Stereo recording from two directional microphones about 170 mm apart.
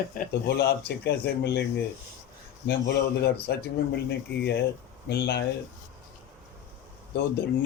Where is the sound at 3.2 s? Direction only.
70° left (ahead or behind).